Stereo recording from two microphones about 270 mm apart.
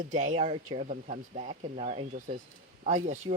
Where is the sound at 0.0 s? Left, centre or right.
Right.